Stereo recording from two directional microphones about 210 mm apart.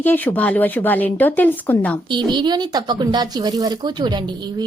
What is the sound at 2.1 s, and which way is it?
Speech, 20° right (ahead or behind).